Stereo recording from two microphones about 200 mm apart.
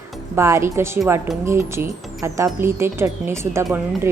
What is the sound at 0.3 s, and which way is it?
Speech, 15° right (ahead or behind).